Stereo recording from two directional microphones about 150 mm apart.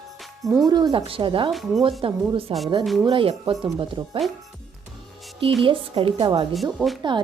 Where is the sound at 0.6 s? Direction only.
25° right (ahead or behind).